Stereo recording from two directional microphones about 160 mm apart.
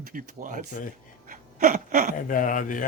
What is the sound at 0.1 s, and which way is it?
Speech, 55° right (ahead or behind).